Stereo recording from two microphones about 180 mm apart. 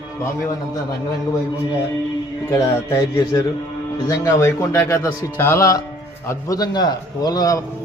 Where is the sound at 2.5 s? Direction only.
15° left (ahead or behind).